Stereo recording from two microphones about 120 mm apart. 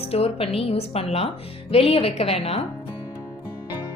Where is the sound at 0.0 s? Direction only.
55° left (ahead or behind).